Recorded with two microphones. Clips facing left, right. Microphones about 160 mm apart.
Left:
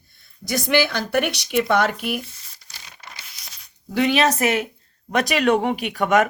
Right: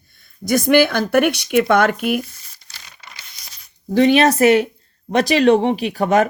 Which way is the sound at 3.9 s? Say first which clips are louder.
Right 6 dB; 40° right (ahead or behind).